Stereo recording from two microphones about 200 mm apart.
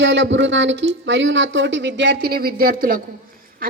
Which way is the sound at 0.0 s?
65° right (ahead or behind).